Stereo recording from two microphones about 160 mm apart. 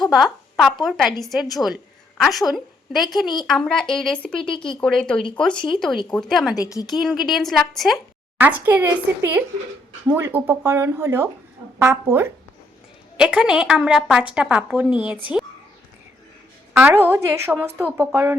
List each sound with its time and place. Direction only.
0.1 s a sound: centre (ahead or behind)
0.9 s a woman's voice: centre (ahead or behind)
4.4 s speech: 30° left (ahead or behind)
4.8 s a woman's voice: 5° left (ahead or behind)
6.6 s a woman's voice: 20° left (ahead or behind)
6.9 s a woman's voice: centre (ahead or behind)
8.4 s speech: 10° right (ahead or behind)
13.1 s a woman's voice: 5° right (ahead or behind)
16.7 s speech: 10° right (ahead or behind)